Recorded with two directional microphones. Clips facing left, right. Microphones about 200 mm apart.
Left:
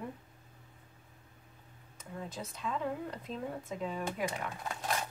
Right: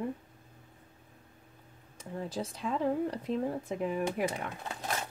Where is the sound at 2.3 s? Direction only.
30° right (ahead or behind).